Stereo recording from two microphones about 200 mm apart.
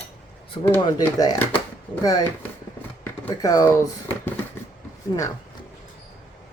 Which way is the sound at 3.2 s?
15° left (ahead or behind).